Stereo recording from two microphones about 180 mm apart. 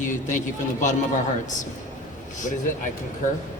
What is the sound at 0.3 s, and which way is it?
Speech, 45° left (ahead or behind).